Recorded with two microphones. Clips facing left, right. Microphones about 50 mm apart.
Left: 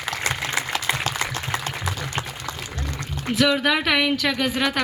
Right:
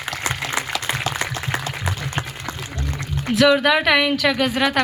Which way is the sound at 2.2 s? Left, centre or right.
Right.